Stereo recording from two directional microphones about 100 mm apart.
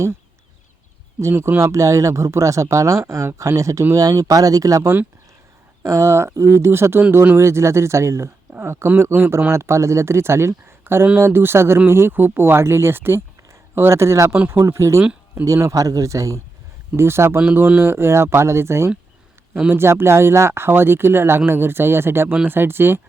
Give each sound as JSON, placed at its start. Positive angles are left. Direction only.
{"t": 1.2, "sound": "speech", "side_deg": -25}